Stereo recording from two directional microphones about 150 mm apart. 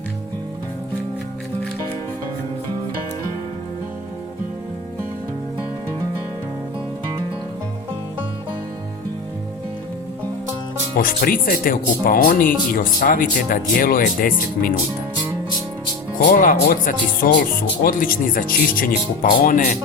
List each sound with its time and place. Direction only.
10.9 s speech: 70° left (ahead or behind)
16.3 s speech: 70° left (ahead or behind)